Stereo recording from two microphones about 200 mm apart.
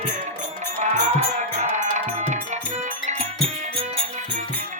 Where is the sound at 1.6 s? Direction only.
35° right (ahead or behind).